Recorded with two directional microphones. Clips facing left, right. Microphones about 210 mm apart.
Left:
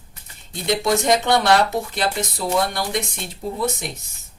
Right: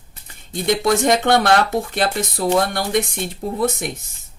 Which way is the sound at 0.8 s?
50° right (ahead or behind).